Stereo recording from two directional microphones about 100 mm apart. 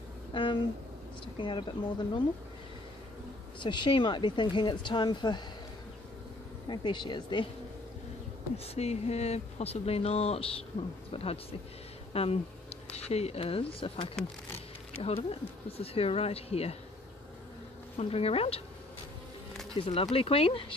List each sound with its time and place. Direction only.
0.3 s speech: 55° left (ahead or behind)
3.5 s speech: 55° left (ahead or behind)
6.7 s speech: 50° left (ahead or behind)
8.7 s speech: 90° left
12.1 s speech: 80° left
12.9 s speech: 90° left; by 14.1 s 65° left (ahead or behind)
15.0 s speech: 80° left
17.9 s speech: 85° left
19.7 s speech: 70° left (ahead or behind)